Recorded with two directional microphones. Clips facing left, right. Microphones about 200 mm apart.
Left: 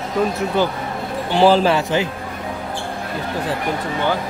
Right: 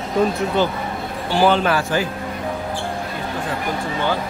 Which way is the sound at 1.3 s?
30° left (ahead or behind).